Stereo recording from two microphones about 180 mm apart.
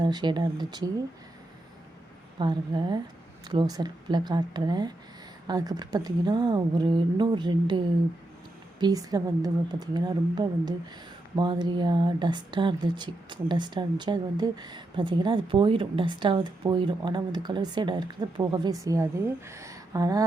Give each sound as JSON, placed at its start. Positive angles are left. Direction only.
{"t": 0.0, "sound": "speech", "side_deg": -25}
{"t": 2.4, "sound": "speech", "side_deg": -25}
{"t": 8.8, "sound": "speech", "side_deg": -20}